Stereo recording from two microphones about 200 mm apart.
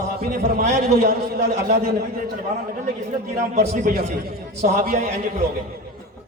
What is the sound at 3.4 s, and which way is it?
A man's voice, 35° right (ahead or behind).